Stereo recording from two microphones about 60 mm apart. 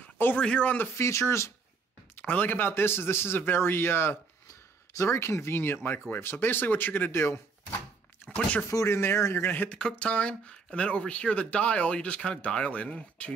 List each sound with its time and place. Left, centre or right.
0.0 s a sound: left
0.4 s speech: left
0.9 s speech: left
2.1 s speech: left
4.9 s speech: left
8.6 s speech: left
9.7 s speech: centre